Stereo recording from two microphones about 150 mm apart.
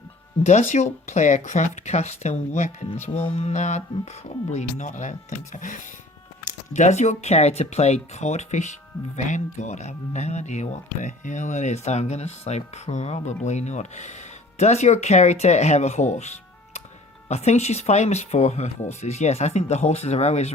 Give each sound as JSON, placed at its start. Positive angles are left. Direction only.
{"t": 0.4, "sound": "speech", "side_deg": 50}